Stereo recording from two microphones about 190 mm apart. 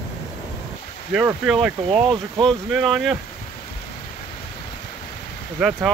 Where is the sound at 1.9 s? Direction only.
30° right (ahead or behind).